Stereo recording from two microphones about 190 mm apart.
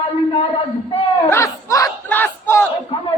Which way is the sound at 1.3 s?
15° left (ahead or behind).